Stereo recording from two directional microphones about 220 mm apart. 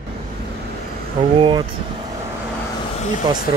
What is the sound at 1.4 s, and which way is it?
Speech, 20° right (ahead or behind).